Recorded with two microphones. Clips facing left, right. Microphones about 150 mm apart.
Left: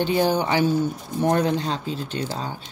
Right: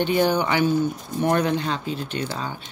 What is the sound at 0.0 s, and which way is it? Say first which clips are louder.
Speech: even; 35° left (ahead or behind).